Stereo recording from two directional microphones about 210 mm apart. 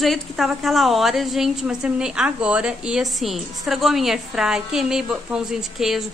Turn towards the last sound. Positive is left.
turn(degrees=0)  # may be behind; listen again after turning